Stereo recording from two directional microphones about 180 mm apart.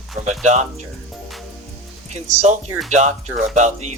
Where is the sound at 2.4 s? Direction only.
40° right (ahead or behind).